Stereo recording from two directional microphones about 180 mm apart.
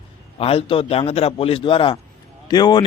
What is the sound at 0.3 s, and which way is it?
A man's voice, 30° left (ahead or behind).